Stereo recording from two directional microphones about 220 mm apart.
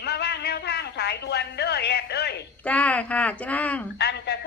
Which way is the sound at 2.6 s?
5° left (ahead or behind).